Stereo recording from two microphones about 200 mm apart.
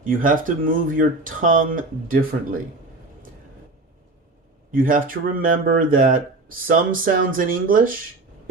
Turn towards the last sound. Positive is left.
turn(degrees=-45)  # may be behind; listen again after turning